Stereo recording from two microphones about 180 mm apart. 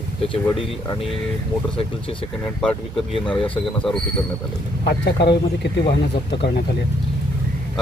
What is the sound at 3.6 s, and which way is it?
Speech, centre (ahead or behind).